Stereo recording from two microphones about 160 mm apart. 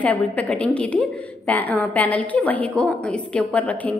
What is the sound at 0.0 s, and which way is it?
A woman's voice, 10° left (ahead or behind).